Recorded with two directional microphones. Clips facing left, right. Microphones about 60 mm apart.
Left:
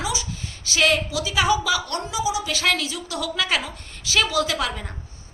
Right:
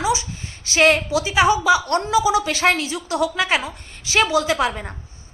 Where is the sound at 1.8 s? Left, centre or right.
Right.